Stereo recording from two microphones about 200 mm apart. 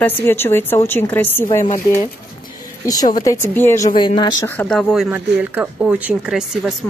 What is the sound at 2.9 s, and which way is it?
A woman's voice, 20° left (ahead or behind).